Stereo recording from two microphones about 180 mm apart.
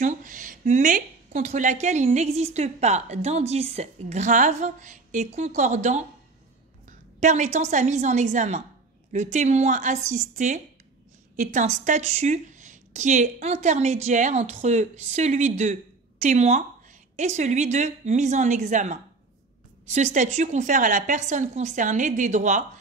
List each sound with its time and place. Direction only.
0.0 s a woman's voice: 45° right (ahead or behind)